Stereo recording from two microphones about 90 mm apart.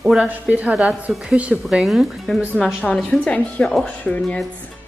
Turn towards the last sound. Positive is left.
turn(degrees=10)  # may be behind; listen again after turning